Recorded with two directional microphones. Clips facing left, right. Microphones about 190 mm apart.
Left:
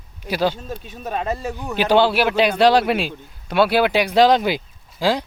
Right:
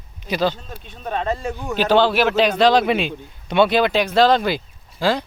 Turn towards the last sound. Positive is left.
turn(degrees=15)  # may be behind; listen again after turning